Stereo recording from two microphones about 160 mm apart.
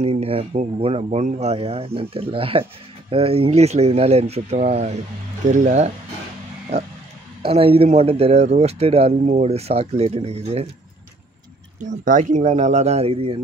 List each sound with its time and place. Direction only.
0.0 s speech: 40° right (ahead or behind)
7.4 s speech: 35° right (ahead or behind)
11.8 s speech: 55° right (ahead or behind); by 13.4 s 40° right (ahead or behind)